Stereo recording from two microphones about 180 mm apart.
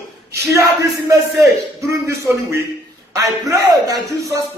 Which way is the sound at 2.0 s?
15° right (ahead or behind).